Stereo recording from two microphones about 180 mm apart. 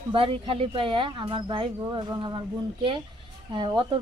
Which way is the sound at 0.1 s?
30° right (ahead or behind).